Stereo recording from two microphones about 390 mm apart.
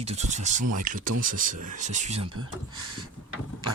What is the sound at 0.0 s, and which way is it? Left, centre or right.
Speech, centre.